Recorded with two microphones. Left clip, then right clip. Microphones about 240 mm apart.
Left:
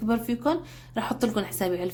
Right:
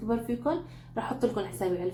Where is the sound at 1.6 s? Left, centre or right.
Left.